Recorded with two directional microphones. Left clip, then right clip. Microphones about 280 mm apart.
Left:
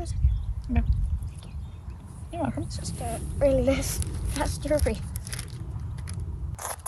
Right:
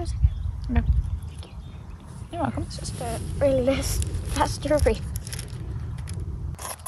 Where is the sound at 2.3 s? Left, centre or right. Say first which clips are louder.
Right 2 dB; centre.